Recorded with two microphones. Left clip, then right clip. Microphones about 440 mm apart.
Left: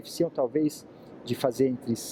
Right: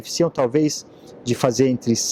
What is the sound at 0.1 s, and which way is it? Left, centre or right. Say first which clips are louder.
Speech: right 8 dB; right.